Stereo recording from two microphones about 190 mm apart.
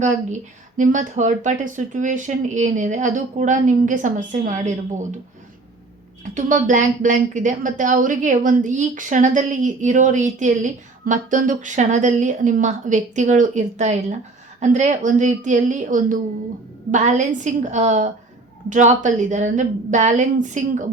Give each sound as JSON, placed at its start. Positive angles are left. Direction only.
{"t": 0.0, "sound": "a woman's voice", "side_deg": -40}
{"t": 6.3, "sound": "a woman's voice", "side_deg": -40}